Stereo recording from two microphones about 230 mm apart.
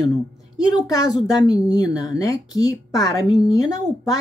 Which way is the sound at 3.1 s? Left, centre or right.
Centre.